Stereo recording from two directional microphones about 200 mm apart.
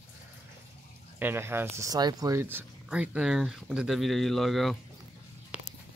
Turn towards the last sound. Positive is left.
turn(degrees=-5)  # may be behind; listen again after turning